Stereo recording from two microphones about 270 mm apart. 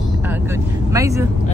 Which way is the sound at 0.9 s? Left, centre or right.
Centre.